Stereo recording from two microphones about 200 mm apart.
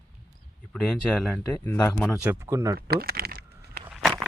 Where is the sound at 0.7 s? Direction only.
5° left (ahead or behind).